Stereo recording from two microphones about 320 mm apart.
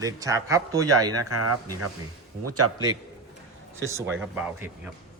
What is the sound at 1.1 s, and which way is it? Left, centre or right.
Speech, right.